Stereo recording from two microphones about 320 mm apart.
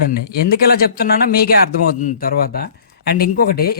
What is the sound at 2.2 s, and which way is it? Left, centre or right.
Speech, left.